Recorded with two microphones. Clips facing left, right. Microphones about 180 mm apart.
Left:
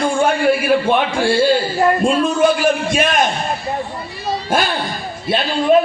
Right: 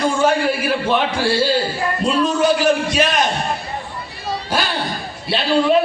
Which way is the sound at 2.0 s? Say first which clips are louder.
Left 2 dB; 50° left (ahead or behind).